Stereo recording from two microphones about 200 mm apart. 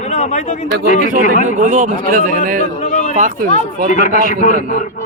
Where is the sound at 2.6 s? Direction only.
35° left (ahead or behind).